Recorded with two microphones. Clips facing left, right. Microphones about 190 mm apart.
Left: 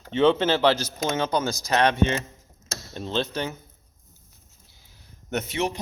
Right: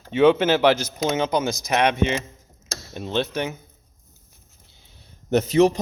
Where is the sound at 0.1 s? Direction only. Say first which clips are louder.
Right 3 dB; 10° right (ahead or behind).